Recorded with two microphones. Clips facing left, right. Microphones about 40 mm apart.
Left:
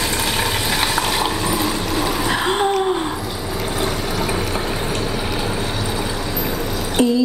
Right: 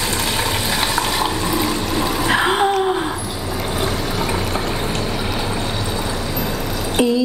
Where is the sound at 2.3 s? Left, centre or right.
Centre.